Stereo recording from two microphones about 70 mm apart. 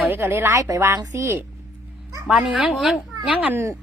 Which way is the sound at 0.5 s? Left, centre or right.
Right.